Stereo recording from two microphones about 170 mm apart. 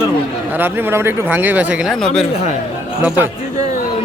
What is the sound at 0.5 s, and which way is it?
Speech, 10° right (ahead or behind).